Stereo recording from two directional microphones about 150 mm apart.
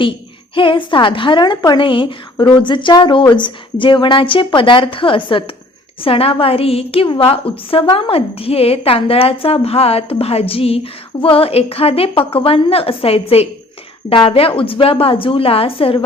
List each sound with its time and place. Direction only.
0.5 s a woman's voice: 35° left (ahead or behind)